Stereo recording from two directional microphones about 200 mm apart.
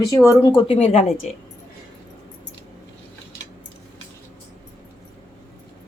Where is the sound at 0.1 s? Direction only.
15° left (ahead or behind).